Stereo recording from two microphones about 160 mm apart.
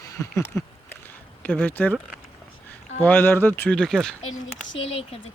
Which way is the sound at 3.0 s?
15° left (ahead or behind).